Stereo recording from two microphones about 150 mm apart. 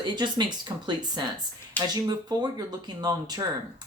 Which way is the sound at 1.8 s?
10° left (ahead or behind).